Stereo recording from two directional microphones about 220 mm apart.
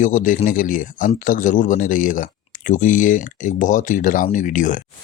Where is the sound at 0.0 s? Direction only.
35° left (ahead or behind).